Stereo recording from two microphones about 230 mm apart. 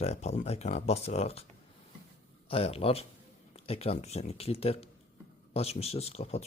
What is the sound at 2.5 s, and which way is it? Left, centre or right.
Speech, left.